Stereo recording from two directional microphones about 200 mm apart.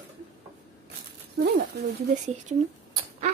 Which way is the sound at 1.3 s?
55° right (ahead or behind).